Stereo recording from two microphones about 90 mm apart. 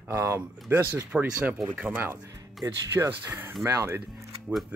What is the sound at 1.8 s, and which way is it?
Speech, 20° right (ahead or behind).